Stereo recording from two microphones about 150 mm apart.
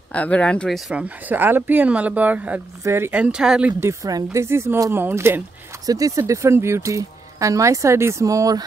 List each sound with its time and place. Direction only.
0.1 s speech: 10° left (ahead or behind)
3.8 s speech: 20° right (ahead or behind)